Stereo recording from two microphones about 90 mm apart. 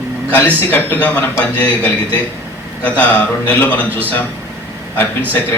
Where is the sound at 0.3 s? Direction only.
20° left (ahead or behind).